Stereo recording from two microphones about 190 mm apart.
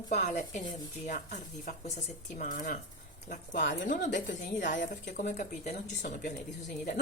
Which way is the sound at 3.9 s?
45° left (ahead or behind).